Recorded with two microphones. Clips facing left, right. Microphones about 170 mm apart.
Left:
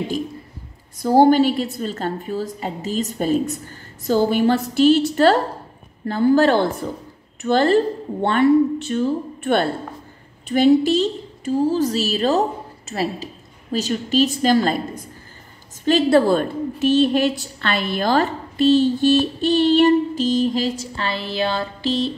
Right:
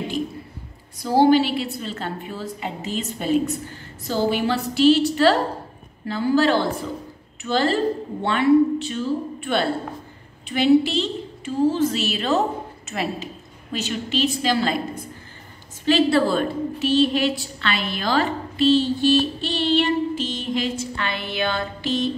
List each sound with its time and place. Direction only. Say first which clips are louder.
1.0 s a woman's voice: left 3 dB; 50° left (ahead or behind)
15.8 s a woman's voice: left 3 dB; 45° left (ahead or behind)